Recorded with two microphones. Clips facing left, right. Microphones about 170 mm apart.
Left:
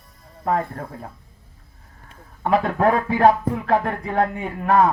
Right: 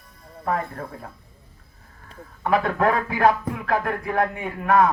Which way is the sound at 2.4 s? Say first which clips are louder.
Left 2 dB; 30° left (ahead or behind).